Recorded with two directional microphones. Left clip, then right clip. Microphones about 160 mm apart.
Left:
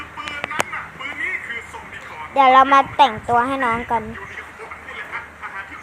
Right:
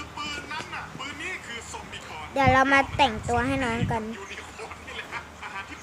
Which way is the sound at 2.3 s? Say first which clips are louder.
Left 9 dB; 20° right (ahead or behind).